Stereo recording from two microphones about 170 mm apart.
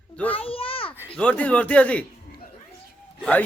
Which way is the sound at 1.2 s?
10° left (ahead or behind).